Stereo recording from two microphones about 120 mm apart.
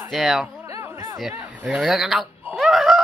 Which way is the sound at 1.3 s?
15° right (ahead or behind).